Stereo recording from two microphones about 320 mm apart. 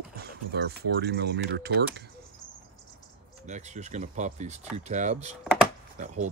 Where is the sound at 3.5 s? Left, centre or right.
Right.